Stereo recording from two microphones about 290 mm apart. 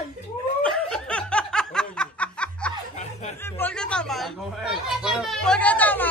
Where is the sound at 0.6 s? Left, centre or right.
Centre.